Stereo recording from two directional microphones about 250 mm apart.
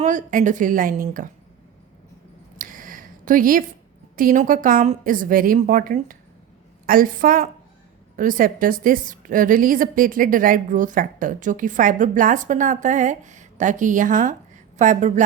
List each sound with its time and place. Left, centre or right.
0.0 s a woman's voice: right
2.6 s a sound: right
4.1 s a woman's voice: right